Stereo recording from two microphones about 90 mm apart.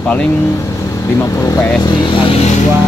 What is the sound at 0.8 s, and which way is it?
Speech, 35° left (ahead or behind).